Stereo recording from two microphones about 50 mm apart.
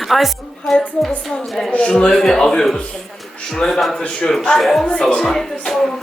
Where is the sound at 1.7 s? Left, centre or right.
Left.